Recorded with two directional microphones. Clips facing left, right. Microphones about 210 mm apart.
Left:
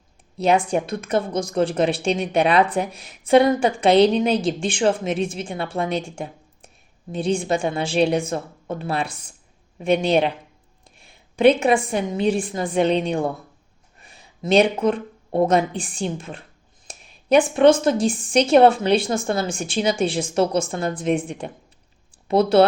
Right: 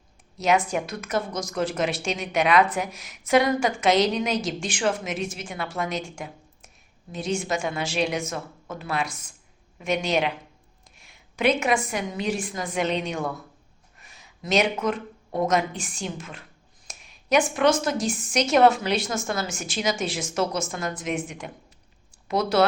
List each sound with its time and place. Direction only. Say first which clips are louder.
0.4 s a woman's voice: left 4 dB; 30° left (ahead or behind)